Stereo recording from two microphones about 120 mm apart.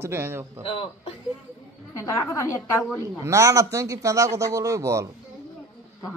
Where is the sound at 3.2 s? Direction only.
25° right (ahead or behind).